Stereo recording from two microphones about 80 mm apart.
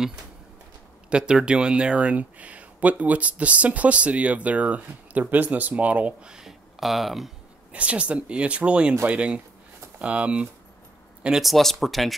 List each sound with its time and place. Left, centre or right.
1.1 s speech: centre
7.7 s speech: centre
11.2 s speech: centre